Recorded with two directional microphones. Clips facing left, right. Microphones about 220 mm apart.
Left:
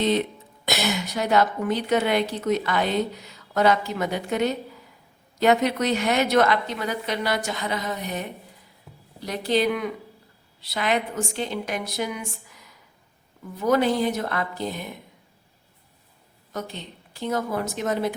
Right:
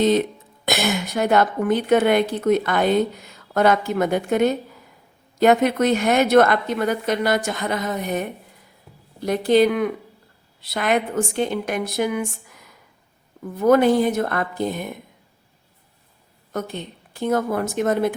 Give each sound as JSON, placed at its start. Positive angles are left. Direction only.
{"t": 0.0, "sound": "a woman's voice", "side_deg": -45}
{"t": 16.5, "sound": "a woman's voice", "side_deg": -50}